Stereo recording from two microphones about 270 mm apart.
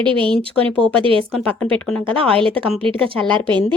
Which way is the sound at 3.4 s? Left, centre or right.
Centre.